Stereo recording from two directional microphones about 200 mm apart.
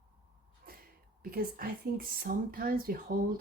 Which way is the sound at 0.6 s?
45° right (ahead or behind).